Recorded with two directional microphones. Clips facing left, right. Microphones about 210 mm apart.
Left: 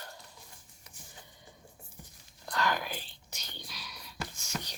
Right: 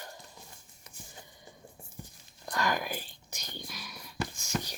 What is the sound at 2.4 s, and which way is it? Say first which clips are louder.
Whispering: right 1 dB; 15° right (ahead or behind).